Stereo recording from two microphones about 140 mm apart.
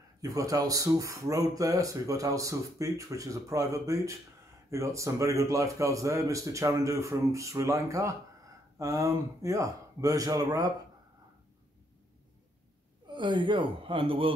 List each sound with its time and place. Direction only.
0.2 s speech: 25° right (ahead or behind)
13.1 s speech: 35° right (ahead or behind)